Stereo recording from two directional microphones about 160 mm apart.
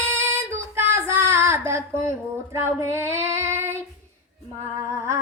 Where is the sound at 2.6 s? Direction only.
15° right (ahead or behind).